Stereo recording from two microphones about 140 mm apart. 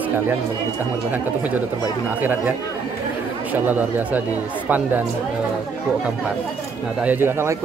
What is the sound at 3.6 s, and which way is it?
Speech, 10° right (ahead or behind).